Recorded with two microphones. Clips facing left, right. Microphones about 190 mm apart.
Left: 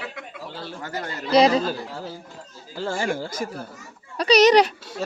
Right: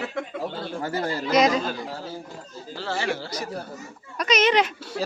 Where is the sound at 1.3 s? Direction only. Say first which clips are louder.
Left 4 dB; 30° left (ahead or behind).